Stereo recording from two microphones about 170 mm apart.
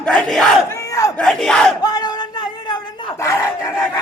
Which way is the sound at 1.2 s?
5° left (ahead or behind).